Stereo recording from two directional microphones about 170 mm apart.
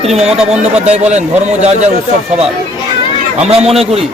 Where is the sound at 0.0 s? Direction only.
40° right (ahead or behind).